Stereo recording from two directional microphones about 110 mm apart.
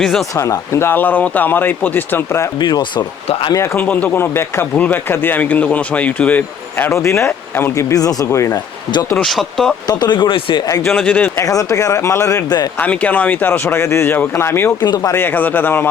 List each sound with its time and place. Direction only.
0.0 s speech: 5° left (ahead or behind)
0.3 s speech: 30° left (ahead or behind)
2.6 s speech: 45° left (ahead or behind)
3.8 s speech: 15° left (ahead or behind)
9.2 s speech: centre (ahead or behind)
9.8 s speech: 40° left (ahead or behind)
10.8 s speech: 10° left (ahead or behind)
11.3 s speech: 30° left (ahead or behind)
12.8 s speech: 15° left (ahead or behind)
14.8 s speech: 35° left (ahead or behind)
15.1 s speech: 20° left (ahead or behind)